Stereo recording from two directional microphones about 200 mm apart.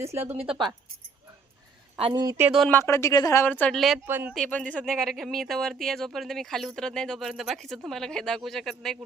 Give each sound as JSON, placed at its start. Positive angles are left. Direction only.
{"t": 0.0, "sound": "speech", "side_deg": -15}
{"t": 2.0, "sound": "a woman's voice", "side_deg": -25}
{"t": 2.5, "sound": "speech", "side_deg": 5}
{"t": 4.4, "sound": "speech", "side_deg": 5}